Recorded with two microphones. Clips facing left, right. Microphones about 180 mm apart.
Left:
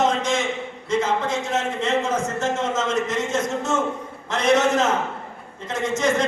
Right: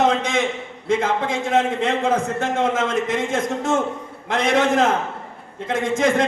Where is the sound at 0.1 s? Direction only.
55° right (ahead or behind).